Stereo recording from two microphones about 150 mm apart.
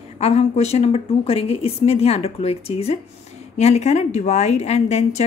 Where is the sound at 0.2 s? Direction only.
45° left (ahead or behind).